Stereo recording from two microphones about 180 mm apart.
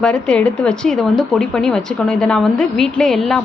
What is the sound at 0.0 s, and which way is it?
Speech, 5° left (ahead or behind).